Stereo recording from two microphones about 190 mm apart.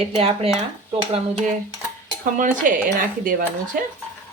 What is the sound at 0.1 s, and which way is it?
Speech, 30° right (ahead or behind).